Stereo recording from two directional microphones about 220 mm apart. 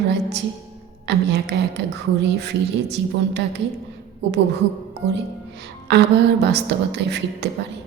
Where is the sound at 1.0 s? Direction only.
50° right (ahead or behind).